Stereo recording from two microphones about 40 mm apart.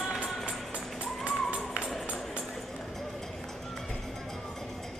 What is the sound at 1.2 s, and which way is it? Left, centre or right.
Music, right.